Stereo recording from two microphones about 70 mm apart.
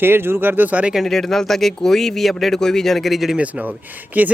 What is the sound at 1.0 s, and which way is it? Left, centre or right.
Speech, centre.